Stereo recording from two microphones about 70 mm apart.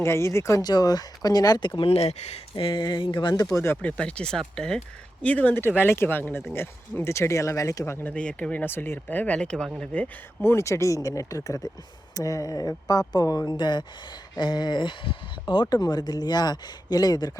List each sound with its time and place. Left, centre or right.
0.0 s speech: left
0.6 s speech: left
2.8 s speech: left
3.8 s speech: centre
5.2 s speech: left
8.0 s speech: centre
8.6 s speech: left
10.4 s speech: left
15.7 s speech: left